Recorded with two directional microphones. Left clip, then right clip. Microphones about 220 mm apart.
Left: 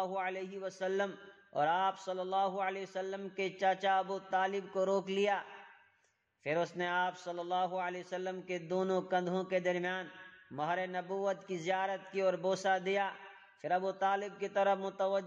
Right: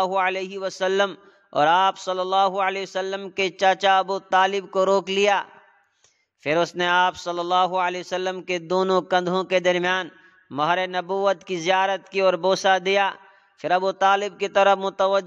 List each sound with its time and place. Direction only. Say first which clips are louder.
0.0 s a man's voice: right 15 dB; 40° right (ahead or behind)
6.4 s a man's voice: right 13 dB; 40° right (ahead or behind)